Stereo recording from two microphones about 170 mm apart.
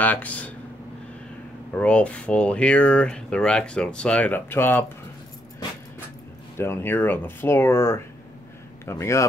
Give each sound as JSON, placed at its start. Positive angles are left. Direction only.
{"t": 0.0, "sound": "speech", "side_deg": 10}
{"t": 1.8, "sound": "speech", "side_deg": 5}
{"t": 6.6, "sound": "speech", "side_deg": 15}